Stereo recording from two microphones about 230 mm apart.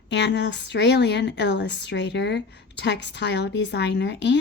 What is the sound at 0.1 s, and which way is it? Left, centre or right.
Speech, left.